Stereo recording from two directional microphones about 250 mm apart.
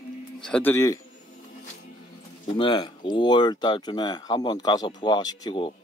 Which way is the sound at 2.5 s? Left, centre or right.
Centre.